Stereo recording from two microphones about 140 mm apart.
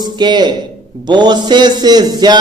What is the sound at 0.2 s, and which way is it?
A man's voice, 30° right (ahead or behind).